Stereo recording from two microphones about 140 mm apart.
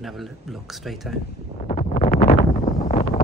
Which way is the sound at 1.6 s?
55° left (ahead or behind).